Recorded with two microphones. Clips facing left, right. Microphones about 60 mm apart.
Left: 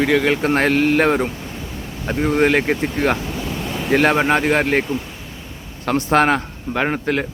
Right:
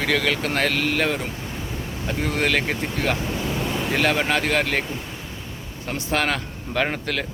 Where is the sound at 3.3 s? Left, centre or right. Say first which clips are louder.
Even; centre.